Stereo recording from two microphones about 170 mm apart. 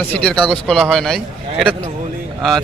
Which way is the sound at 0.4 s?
5° left (ahead or behind).